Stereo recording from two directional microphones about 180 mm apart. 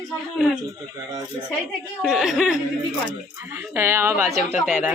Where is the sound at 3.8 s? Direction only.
15° right (ahead or behind).